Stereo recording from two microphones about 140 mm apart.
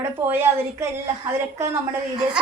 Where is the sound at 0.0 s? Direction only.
15° right (ahead or behind).